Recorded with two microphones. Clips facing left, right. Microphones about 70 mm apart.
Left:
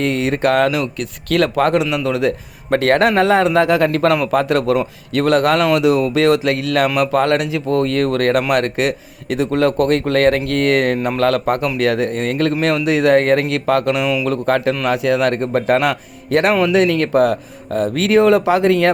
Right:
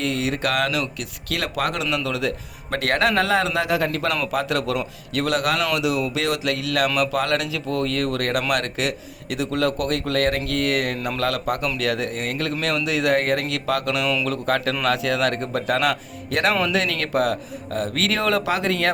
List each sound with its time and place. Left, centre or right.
0.0 s speech: left
0.9 s speech: left
1.8 s a man's voice: centre
2.0 s speech: left
14.0 s speech: centre
14.3 s speech: left